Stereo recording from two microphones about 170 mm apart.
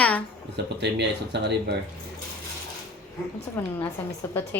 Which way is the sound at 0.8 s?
90° right.